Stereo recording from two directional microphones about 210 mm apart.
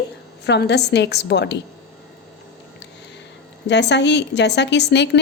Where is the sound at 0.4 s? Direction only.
55° left (ahead or behind).